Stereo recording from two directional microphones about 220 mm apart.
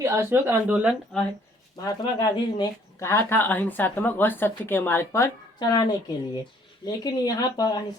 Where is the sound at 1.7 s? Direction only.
15° left (ahead or behind).